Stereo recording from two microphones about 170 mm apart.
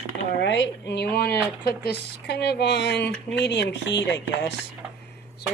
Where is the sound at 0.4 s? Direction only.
90° left.